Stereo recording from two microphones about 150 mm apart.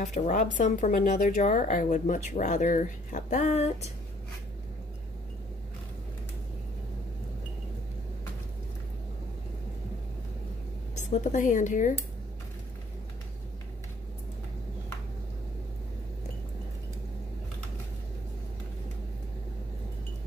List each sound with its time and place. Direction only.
0.0 s a woman's voice: 55° left (ahead or behind)
11.0 s a woman's voice: 55° left (ahead or behind)